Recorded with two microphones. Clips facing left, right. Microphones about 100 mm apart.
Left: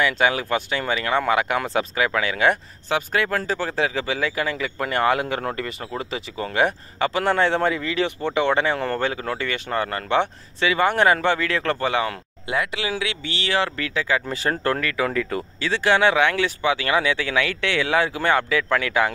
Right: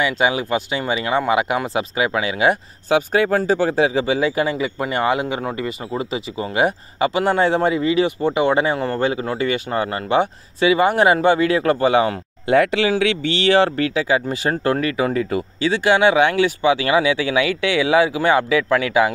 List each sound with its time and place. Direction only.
0.0 s speech: 5° right (ahead or behind)
2.9 s speech: 20° right (ahead or behind)
12.4 s speech: 40° right (ahead or behind)
13.9 s speech: 15° right (ahead or behind)